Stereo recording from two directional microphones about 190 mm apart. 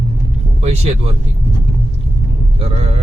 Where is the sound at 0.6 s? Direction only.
35° right (ahead or behind).